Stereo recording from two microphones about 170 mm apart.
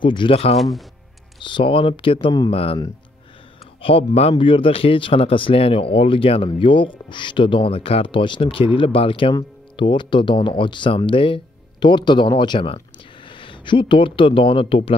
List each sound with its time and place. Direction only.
0.0 s speech: 30° left (ahead or behind)
0.6 s speech: centre (ahead or behind)
1.4 s speech: 30° left (ahead or behind)
3.8 s speech: 35° left (ahead or behind)